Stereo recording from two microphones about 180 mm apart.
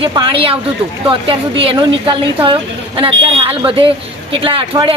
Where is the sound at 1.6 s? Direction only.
25° right (ahead or behind).